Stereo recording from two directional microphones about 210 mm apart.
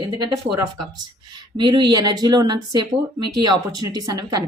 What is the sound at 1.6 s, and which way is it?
Speech, 20° right (ahead or behind).